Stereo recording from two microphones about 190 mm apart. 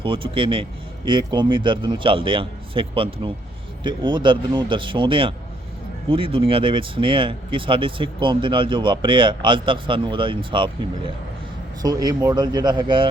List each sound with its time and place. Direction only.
0.0 s speech: 25° right (ahead or behind)